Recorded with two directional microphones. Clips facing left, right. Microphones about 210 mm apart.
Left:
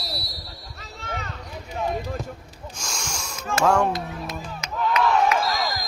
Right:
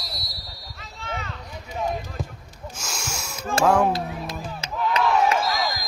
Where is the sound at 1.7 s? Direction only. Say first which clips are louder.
Even; centre (ahead or behind).